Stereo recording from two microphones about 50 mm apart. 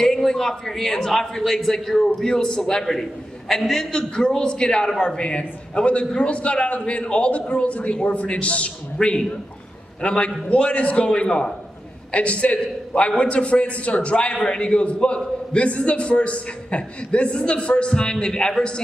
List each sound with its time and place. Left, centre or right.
0.0 s a man's voice: centre; by 8.7 s left
10.0 s a man's voice: left